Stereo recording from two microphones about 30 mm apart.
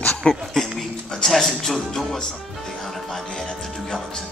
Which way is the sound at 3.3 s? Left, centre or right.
Centre.